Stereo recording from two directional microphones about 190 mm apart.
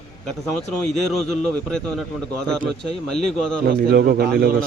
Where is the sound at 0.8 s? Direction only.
5° left (ahead or behind).